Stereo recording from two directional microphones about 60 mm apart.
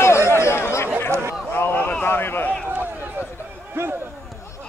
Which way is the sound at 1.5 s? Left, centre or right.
Left.